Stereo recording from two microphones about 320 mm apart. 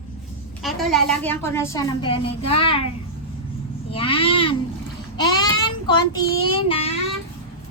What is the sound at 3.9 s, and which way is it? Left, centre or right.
Speech, centre.